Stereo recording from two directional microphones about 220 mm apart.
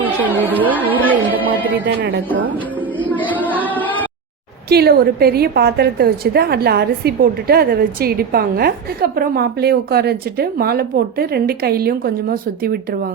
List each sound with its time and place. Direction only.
0.0 s speech: 10° right (ahead or behind)
1.3 s music: 10° right (ahead or behind)
1.8 s a woman's voice: 55° right (ahead or behind)
3.0 s a sound: 5° left (ahead or behind)
4.7 s a woman's voice: 45° right (ahead or behind)